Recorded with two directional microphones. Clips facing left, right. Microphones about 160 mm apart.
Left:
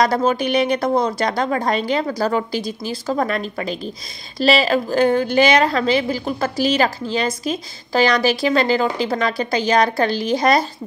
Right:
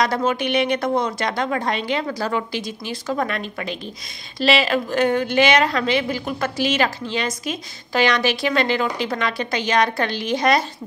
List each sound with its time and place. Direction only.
0.0 s a woman's voice: 35° left (ahead or behind)